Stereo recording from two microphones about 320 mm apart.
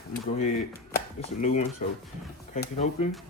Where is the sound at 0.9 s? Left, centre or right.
Left.